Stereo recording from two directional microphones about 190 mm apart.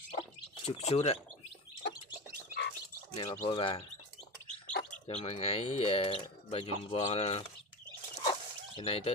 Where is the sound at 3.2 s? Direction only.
25° left (ahead or behind).